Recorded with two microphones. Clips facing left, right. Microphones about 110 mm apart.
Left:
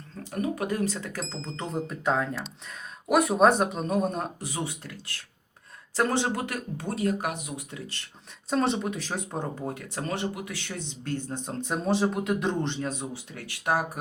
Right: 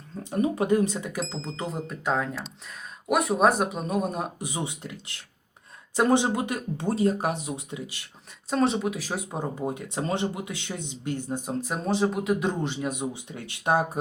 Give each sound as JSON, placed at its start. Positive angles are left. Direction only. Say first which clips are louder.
{"t": 0.2, "sound": "speech", "louder": "right 4 dB", "side_deg": -20}
{"t": 4.4, "sound": "speech", "louder": "right 1 dB", "side_deg": -15}
{"t": 7.7, "sound": "speech", "louder": "right 3 dB", "side_deg": -15}
{"t": 8.4, "sound": "speech", "louder": "right 2 dB", "side_deg": 0}